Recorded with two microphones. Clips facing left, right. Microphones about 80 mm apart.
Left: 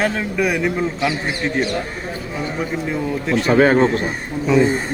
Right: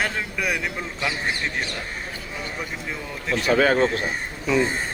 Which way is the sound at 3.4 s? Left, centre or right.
Left.